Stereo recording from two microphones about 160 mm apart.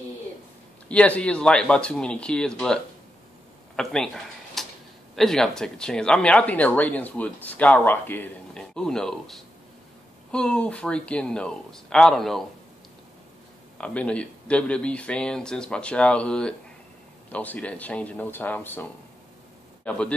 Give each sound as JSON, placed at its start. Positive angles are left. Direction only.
{"t": 0.8, "sound": "speech", "side_deg": 10}
{"t": 3.7, "sound": "a sound", "side_deg": 5}
{"t": 5.1, "sound": "speech", "side_deg": 5}
{"t": 13.7, "sound": "a man's voice", "side_deg": 5}